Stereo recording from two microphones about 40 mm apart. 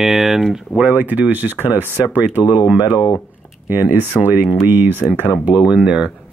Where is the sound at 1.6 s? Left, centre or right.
Right.